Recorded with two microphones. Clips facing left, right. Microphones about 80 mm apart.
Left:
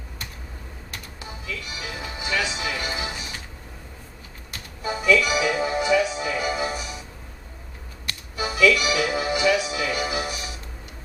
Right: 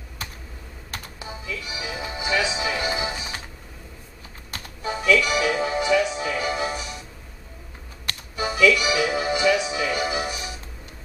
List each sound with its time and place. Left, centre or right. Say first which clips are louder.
1.2 s music: right 1 dB; centre
4.8 s music: even; centre
8.5 s music: even; centre